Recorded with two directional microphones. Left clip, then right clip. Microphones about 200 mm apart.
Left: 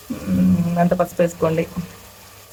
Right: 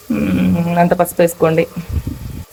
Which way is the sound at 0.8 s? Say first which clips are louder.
Right 6 dB; 30° right (ahead or behind).